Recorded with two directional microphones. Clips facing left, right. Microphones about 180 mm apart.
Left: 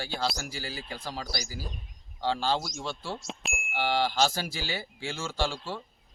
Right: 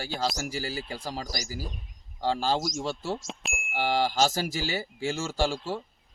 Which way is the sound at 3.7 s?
40° right (ahead or behind).